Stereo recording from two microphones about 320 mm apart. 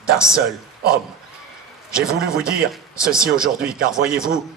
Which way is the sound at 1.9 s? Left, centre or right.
Centre.